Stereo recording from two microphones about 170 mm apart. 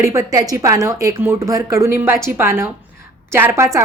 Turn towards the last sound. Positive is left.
turn(degrees=-15)  # may be behind; listen again after turning